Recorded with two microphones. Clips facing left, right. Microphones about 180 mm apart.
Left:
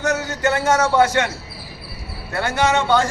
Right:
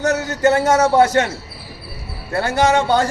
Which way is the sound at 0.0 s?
40° right (ahead or behind).